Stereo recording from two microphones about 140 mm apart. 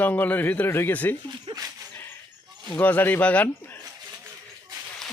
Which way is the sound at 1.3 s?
30° right (ahead or behind).